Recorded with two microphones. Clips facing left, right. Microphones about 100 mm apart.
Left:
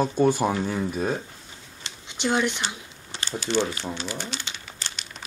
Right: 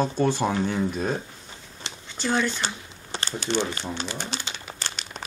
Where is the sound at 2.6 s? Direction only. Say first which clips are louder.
Right 1 dB; 40° right (ahead or behind).